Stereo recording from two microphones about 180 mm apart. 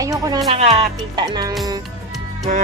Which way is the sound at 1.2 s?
20° right (ahead or behind).